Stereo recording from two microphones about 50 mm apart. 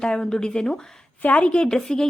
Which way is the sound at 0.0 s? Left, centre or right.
Centre.